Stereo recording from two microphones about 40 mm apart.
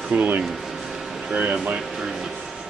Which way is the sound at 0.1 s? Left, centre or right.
Right.